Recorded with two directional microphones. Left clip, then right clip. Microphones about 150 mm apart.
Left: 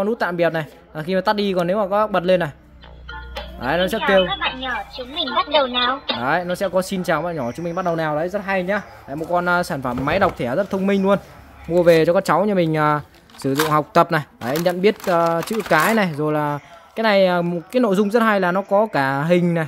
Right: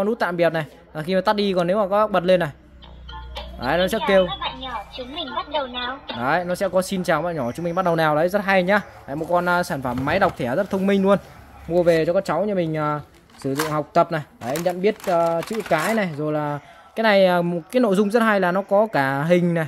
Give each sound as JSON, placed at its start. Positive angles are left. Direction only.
{"t": 0.0, "sound": "a woman's voice", "side_deg": 0}
{"t": 3.1, "sound": "music", "side_deg": 0}
{"t": 5.1, "sound": "speech", "side_deg": 40}
{"t": 6.1, "sound": "a woman's voice", "side_deg": 0}
{"t": 7.8, "sound": "speech", "side_deg": -35}
{"t": 9.3, "sound": "a woman's voice", "side_deg": 0}
{"t": 11.7, "sound": "speech", "side_deg": 25}
{"t": 15.0, "sound": "speech", "side_deg": 20}
{"t": 16.9, "sound": "a woman's voice", "side_deg": 0}